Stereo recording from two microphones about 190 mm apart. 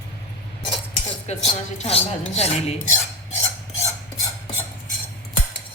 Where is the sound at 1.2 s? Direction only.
35° left (ahead or behind).